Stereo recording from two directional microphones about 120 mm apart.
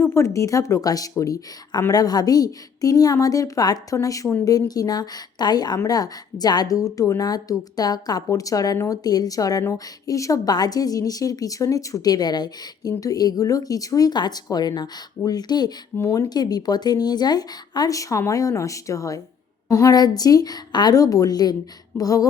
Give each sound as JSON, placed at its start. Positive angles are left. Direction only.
{"t": 0.0, "sound": "a woman's voice", "side_deg": 25}
{"t": 16.0, "sound": "speech", "side_deg": 20}
{"t": 16.3, "sound": "a woman's voice", "side_deg": 35}